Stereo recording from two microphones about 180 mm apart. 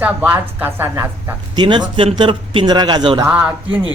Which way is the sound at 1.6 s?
25° right (ahead or behind).